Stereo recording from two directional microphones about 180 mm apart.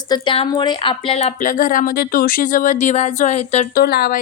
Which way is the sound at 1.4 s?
50° left (ahead or behind).